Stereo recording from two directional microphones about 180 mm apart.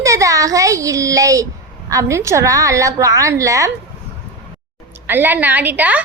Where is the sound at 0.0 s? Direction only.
20° right (ahead or behind).